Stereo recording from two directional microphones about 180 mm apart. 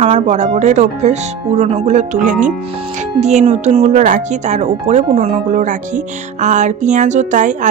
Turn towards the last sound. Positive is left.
turn(degrees=-45)  # may be behind; listen again after turning